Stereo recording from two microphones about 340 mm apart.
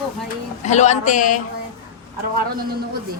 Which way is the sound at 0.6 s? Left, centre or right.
Centre.